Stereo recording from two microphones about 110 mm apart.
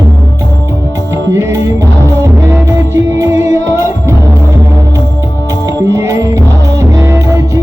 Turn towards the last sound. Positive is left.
turn(degrees=-25)  # may be behind; listen again after turning